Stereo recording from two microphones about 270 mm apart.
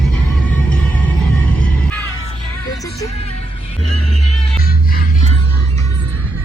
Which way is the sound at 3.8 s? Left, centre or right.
Left.